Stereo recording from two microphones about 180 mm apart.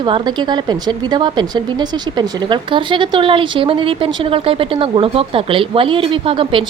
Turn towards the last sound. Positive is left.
turn(degrees=-30)  # may be behind; listen again after turning